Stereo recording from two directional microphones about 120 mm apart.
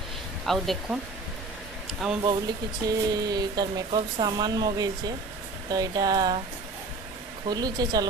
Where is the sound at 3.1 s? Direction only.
35° right (ahead or behind).